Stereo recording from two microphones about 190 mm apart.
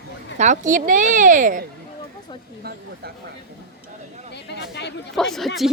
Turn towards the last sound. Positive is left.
turn(degrees=0)  # may be behind; listen again after turning